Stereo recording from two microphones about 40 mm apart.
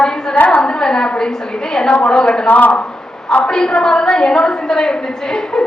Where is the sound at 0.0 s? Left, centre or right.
Centre.